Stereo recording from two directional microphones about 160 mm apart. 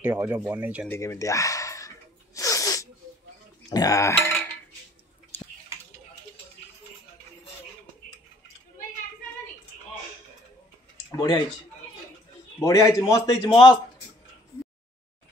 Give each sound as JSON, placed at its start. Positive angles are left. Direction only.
{"t": 0.0, "sound": "speech", "side_deg": -15}
{"t": 0.8, "sound": "a sound", "side_deg": 15}
{"t": 3.7, "sound": "speech", "side_deg": 20}
{"t": 11.1, "sound": "speech", "side_deg": 25}
{"t": 12.5, "sound": "a man's voice", "side_deg": 20}
{"t": 13.5, "sound": "a man's voice", "side_deg": 30}